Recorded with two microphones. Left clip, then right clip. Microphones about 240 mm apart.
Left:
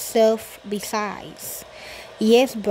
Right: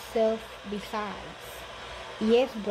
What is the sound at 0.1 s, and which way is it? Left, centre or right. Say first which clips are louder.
Speech: left 9 dB; left.